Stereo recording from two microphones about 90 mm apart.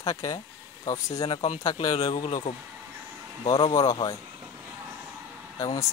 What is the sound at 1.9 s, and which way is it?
Speech, 85° left.